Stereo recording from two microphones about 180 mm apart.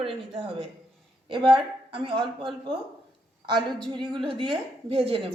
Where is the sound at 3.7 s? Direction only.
25° right (ahead or behind).